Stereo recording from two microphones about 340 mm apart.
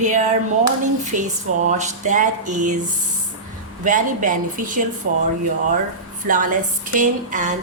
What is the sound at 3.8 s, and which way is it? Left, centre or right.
A woman's voice, right.